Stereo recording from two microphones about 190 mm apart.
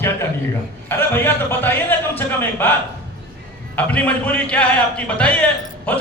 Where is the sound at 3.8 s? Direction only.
5° left (ahead or behind).